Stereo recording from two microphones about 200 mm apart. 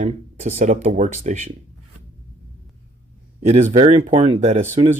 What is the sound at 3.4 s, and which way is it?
Speech, 30° right (ahead or behind).